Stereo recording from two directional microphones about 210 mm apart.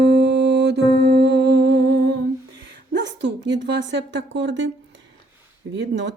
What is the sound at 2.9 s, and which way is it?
A woman's voice, 60° right (ahead or behind).